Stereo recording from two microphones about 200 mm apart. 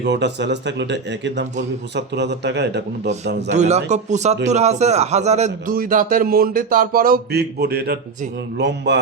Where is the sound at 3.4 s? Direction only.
35° right (ahead or behind).